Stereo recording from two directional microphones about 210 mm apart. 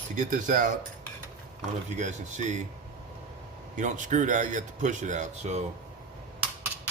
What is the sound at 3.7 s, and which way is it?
Speech, 35° right (ahead or behind).